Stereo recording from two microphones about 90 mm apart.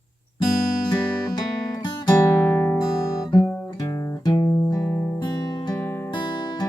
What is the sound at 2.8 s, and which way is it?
Guitar, 45° left (ahead or behind).